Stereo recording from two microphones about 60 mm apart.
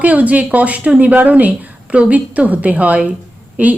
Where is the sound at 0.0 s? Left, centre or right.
Right.